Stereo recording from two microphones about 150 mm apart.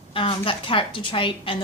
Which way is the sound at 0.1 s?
35° left (ahead or behind).